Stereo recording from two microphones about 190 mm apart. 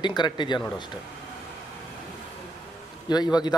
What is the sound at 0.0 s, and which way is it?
Speech, 25° left (ahead or behind).